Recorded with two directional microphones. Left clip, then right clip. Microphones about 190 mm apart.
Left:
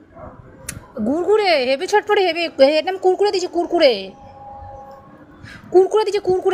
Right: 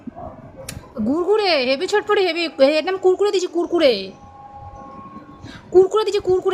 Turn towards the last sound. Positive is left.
turn(degrees=5)  # may be behind; listen again after turning